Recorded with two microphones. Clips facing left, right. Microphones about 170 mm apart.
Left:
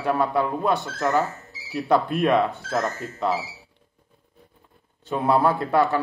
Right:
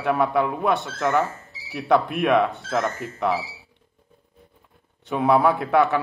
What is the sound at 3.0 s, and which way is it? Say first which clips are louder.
Speech: right 1 dB; 65° right (ahead or behind).